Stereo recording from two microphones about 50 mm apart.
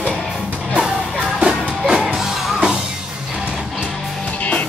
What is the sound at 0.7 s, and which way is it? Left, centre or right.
Music, centre.